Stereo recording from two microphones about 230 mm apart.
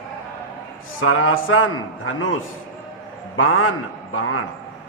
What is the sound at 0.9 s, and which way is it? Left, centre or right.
A man's voice, left.